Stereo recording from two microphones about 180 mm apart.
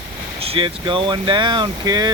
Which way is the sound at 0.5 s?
30° right (ahead or behind).